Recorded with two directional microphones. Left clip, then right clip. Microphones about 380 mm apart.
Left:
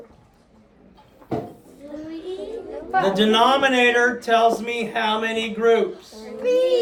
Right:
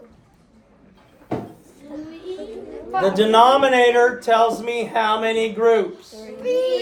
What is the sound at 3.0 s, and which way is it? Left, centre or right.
Speech, centre.